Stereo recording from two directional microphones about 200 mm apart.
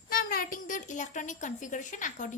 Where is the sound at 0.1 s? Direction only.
45° left (ahead or behind).